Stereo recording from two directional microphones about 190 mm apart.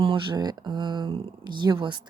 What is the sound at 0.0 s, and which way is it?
Speech, 25° right (ahead or behind).